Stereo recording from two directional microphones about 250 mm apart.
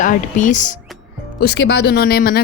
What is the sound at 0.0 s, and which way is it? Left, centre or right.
Speech, left.